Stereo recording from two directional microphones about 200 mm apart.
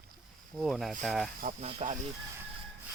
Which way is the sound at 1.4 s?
35° right (ahead or behind).